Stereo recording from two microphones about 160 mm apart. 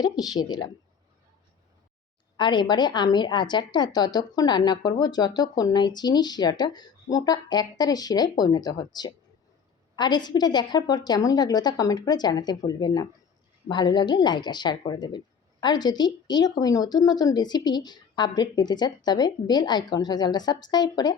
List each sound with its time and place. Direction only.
0.0 s a woman's voice: 25° left (ahead or behind)
2.4 s a woman's voice: 30° left (ahead or behind)